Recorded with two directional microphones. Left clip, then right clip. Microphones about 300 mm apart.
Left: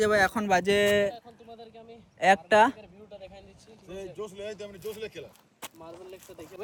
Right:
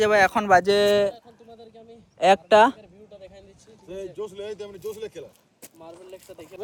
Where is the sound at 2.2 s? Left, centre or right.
Centre.